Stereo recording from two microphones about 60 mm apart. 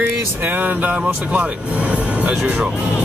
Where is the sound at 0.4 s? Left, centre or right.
Right.